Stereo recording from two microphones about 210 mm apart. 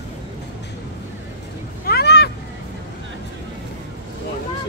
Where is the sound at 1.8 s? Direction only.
50° left (ahead or behind).